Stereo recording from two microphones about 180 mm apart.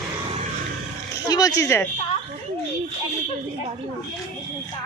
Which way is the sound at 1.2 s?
20° left (ahead or behind).